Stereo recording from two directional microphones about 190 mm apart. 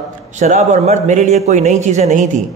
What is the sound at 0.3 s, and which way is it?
Speech, 40° right (ahead or behind).